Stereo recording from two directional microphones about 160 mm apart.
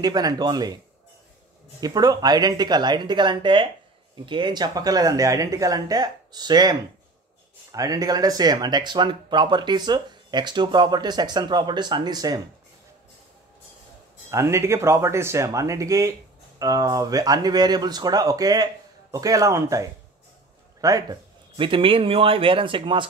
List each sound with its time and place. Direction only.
0.0 s speech: 25° right (ahead or behind)
1.8 s speech: 25° right (ahead or behind)
14.3 s speech: 15° right (ahead or behind)